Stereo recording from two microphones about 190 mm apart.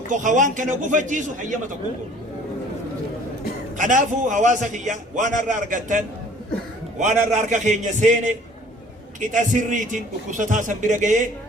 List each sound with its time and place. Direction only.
0.1 s a man's voice: 40° right (ahead or behind)
3.8 s a man's voice: 40° right (ahead or behind)
7.0 s a man's voice: 40° right (ahead or behind)
9.3 s a man's voice: 40° right (ahead or behind)